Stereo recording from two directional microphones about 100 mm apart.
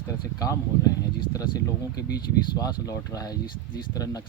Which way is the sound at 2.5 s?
40° left (ahead or behind).